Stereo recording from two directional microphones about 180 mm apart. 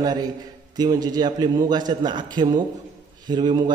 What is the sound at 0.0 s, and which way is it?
A man's voice, 20° right (ahead or behind).